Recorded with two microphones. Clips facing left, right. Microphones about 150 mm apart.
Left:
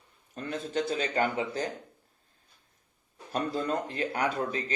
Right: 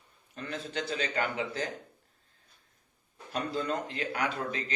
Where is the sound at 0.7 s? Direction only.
45° left (ahead or behind).